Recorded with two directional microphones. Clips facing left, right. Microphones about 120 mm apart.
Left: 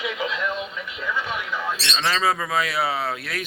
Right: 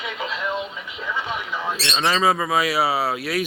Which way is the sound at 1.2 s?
15° right (ahead or behind).